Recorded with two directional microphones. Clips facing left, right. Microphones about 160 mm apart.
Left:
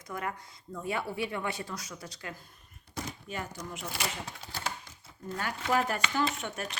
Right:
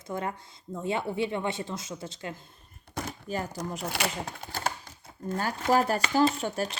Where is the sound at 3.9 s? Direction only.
60° right (ahead or behind).